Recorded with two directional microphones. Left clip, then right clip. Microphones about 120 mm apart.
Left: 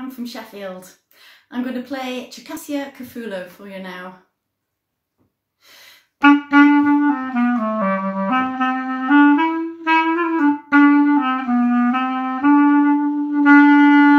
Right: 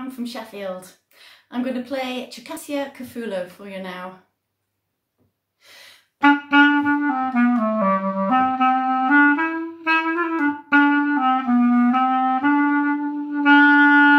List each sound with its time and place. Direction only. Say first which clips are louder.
0.2 s speech: right 2 dB; 15° right (ahead or behind)
6.2 s clarinet: left 2 dB; 5° right (ahead or behind)
7.5 s clarinet: even; 25° left (ahead or behind)
8.4 s clarinet: right 5 dB; centre (ahead or behind)